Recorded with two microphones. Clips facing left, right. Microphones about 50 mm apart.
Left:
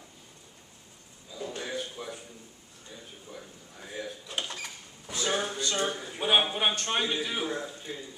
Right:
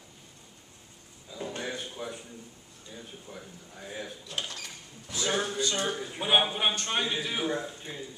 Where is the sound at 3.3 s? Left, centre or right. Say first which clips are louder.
Left 1 dB; right.